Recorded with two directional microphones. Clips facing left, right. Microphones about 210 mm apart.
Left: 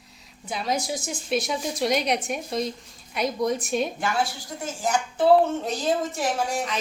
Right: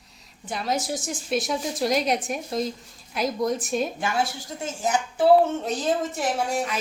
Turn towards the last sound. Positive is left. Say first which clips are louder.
# right 1 dB
turn(degrees=0)  # may be behind; listen again after turning